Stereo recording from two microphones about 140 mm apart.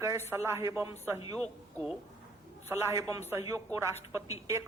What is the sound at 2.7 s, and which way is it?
A man's voice, 15° right (ahead or behind).